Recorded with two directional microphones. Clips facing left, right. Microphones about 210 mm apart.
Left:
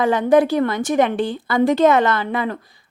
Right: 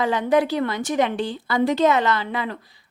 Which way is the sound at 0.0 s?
50° left (ahead or behind).